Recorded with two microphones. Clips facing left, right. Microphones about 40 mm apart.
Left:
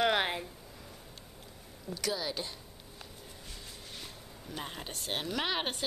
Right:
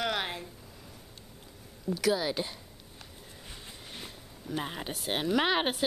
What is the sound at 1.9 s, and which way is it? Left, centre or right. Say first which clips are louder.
Speech: right 7 dB; centre.